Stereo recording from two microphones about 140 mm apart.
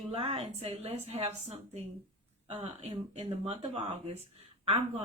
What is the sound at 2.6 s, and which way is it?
A woman's voice, 50° right (ahead or behind).